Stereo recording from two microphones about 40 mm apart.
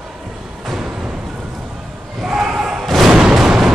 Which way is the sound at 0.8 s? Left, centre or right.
Centre.